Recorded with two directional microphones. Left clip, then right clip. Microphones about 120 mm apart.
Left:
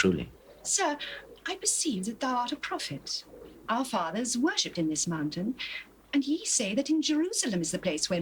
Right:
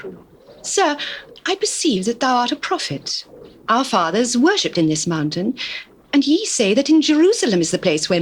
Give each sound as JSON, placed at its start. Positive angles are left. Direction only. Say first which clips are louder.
{"t": 0.6, "sound": "a woman's voice", "louder": "right 11 dB", "side_deg": -35}